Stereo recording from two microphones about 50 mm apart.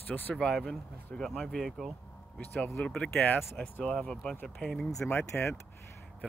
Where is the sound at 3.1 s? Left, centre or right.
Left.